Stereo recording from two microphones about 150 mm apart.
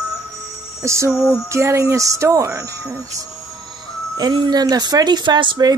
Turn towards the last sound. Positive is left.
turn(degrees=-30)  # may be behind; listen again after turning